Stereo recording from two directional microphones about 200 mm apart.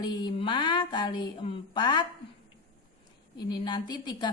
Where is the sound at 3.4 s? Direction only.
20° left (ahead or behind).